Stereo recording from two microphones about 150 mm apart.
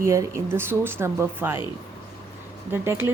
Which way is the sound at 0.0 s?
20° right (ahead or behind).